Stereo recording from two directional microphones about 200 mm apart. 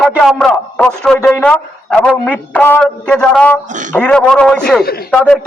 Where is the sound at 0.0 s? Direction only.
5° left (ahead or behind).